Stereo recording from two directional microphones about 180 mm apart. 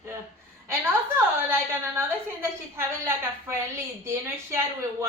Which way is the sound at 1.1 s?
15° right (ahead or behind).